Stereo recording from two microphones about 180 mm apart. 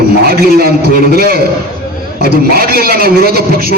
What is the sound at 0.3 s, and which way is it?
A man's voice, 55° right (ahead or behind).